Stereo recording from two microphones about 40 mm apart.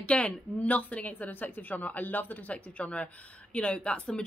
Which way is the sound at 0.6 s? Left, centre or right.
Left.